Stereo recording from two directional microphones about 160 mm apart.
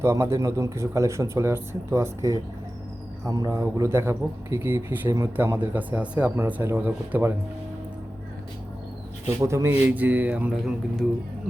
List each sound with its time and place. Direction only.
0.0 s a man's voice: 15° right (ahead or behind)
9.2 s a man's voice: 20° right (ahead or behind)